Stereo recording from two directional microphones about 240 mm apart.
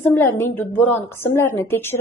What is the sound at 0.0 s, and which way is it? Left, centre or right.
A woman's voice, centre.